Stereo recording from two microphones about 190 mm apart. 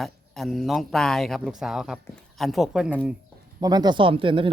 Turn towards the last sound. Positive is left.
turn(degrees=-25)  # may be behind; listen again after turning